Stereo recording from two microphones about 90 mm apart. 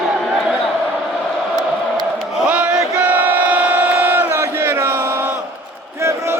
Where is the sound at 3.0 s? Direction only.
20° right (ahead or behind).